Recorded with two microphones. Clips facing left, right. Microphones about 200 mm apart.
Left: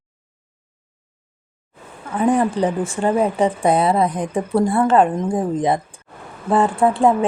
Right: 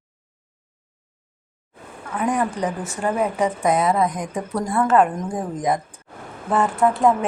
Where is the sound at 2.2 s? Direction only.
30° left (ahead or behind).